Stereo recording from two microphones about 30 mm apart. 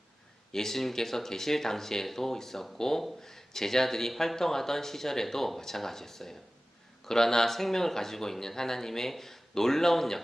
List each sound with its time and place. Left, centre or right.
0.5 s speech: centre